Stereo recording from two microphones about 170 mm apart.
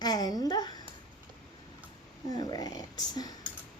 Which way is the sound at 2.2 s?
20° left (ahead or behind).